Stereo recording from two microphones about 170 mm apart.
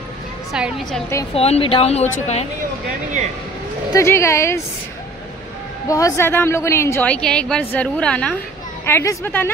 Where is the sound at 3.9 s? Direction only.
15° left (ahead or behind).